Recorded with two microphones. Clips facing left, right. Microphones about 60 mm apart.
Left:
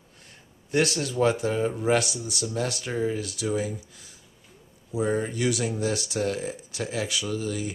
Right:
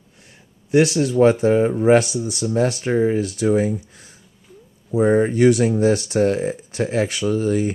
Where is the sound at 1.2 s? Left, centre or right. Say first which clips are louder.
Right 8 dB; right.